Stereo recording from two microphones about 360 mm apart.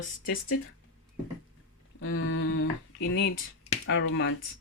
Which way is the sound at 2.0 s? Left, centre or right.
Left.